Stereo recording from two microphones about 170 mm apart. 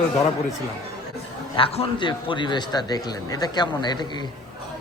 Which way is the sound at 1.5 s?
35° left (ahead or behind).